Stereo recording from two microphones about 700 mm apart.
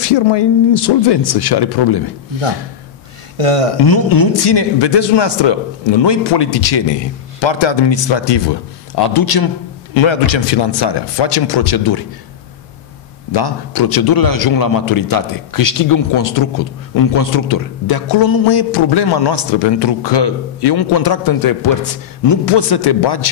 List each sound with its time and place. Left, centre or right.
0.0 s a man's voice: left
3.3 s speech: right
3.8 s a man's voice: left
13.3 s a man's voice: left